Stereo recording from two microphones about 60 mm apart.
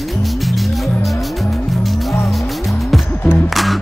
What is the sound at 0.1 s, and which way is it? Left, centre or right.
Music, centre.